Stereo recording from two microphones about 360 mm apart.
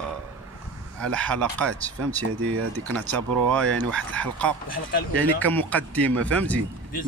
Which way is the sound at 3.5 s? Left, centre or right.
Centre.